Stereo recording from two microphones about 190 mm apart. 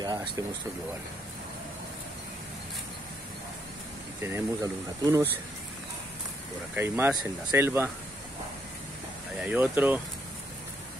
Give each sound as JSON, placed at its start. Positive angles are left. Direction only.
{"t": 0.0, "sound": "speech", "side_deg": -20}
{"t": 4.2, "sound": "speech", "side_deg": -15}
{"t": 6.7, "sound": "speech", "side_deg": -10}
{"t": 9.4, "sound": "speech", "side_deg": -10}